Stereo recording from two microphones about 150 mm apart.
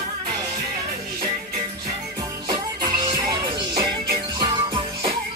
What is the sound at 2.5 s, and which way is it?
Music, 30° right (ahead or behind).